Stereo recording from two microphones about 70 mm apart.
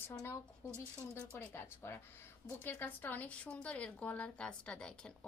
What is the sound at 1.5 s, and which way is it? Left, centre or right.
Speech, left.